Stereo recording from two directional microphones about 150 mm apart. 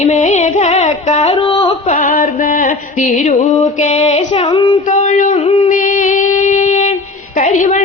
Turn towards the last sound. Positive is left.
turn(degrees=55)  # may be behind; listen again after turning